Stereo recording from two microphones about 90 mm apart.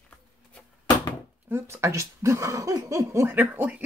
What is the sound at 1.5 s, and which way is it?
Speech, 25° right (ahead or behind).